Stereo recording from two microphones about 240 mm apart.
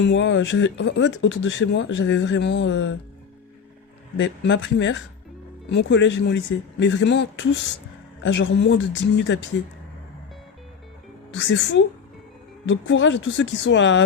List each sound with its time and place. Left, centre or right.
0.0 s speech: left
4.2 s speech: left
11.3 s speech: left